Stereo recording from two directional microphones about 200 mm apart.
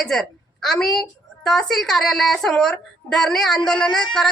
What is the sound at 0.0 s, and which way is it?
A woman's voice, centre (ahead or behind).